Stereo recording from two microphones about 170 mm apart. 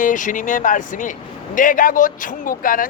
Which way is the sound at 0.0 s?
50° left (ahead or behind).